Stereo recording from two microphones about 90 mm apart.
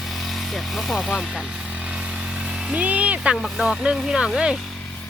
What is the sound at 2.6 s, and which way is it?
Speech, 15° right (ahead or behind).